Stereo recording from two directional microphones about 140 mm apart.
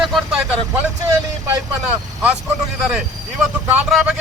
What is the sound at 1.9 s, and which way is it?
Speech, 15° right (ahead or behind).